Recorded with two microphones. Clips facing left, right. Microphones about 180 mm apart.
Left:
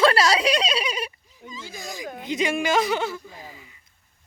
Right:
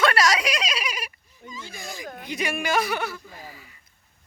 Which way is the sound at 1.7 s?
15° left (ahead or behind).